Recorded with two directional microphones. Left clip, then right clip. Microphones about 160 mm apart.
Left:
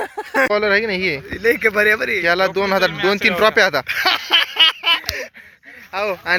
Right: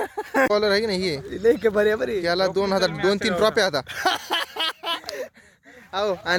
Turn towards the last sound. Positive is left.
turn(degrees=-30)  # may be behind; listen again after turning